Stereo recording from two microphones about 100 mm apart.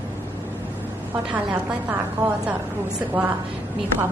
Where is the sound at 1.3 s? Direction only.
15° right (ahead or behind).